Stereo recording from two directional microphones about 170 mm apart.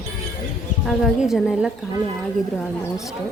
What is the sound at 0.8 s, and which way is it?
A woman's voice, centre (ahead or behind).